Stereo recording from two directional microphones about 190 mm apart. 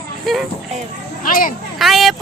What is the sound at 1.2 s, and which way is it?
Speech, 45° left (ahead or behind).